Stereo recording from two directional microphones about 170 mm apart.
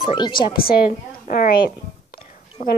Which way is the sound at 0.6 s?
60° left (ahead or behind).